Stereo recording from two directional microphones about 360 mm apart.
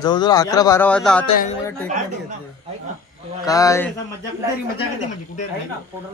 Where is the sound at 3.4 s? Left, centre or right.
Centre.